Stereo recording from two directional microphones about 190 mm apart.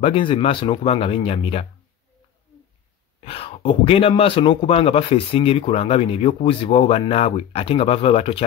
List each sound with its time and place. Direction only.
0.0 s a man's voice: 30° left (ahead or behind)
3.3 s a man's voice: 30° left (ahead or behind)